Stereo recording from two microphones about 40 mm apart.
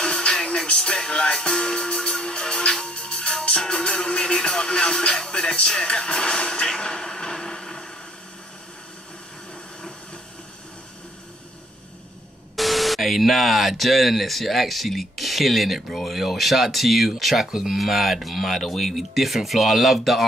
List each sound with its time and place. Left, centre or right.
0.0 s music: centre
12.5 s speech: centre